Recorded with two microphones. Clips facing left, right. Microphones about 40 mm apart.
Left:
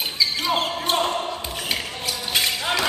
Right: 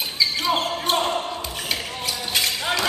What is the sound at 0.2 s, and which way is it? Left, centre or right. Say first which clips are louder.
Basketball bounce: right 1 dB; centre.